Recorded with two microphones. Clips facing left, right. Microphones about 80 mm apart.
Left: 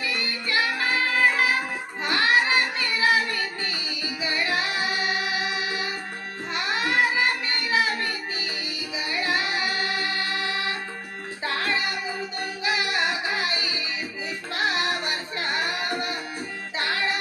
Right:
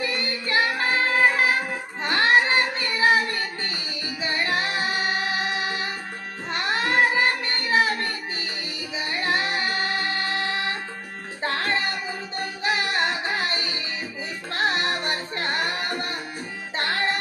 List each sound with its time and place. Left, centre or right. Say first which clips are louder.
0.0 s music: right 2 dB; right
2.0 s child singing: right 2 dB; right
9.0 s music: right 1 dB; right